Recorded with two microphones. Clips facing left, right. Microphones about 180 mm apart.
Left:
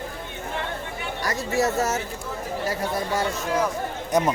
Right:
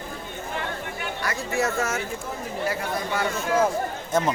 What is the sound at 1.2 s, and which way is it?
Speech, 40° left (ahead or behind).